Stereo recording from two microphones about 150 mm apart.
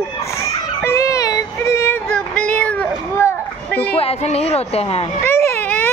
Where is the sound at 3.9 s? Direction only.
40° left (ahead or behind).